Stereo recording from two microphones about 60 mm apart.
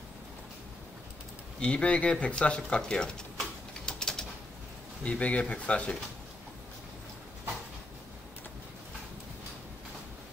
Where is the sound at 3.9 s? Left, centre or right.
Centre.